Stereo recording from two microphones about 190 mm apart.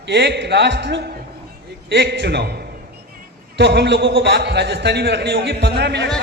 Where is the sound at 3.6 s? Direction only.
65° right (ahead or behind).